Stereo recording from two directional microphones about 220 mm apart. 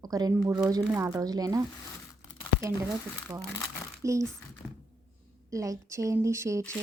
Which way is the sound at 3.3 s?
15° right (ahead or behind).